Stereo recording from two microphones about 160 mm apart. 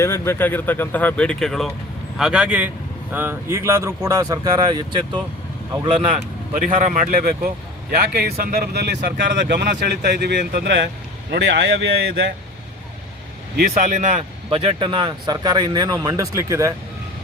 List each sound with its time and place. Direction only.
0.0 s speech: 15° left (ahead or behind); by 6.2 s 35° right (ahead or behind)
6.5 s a man's voice: 55° right (ahead or behind); by 10.8 s 90° right
13.6 s speech: 65° right (ahead or behind)
14.5 s speech: 35° right (ahead or behind)